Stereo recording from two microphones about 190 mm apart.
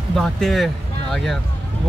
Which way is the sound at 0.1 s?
Centre (ahead or behind).